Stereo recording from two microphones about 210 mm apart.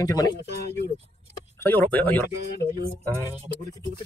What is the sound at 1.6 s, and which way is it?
Speech, 10° left (ahead or behind).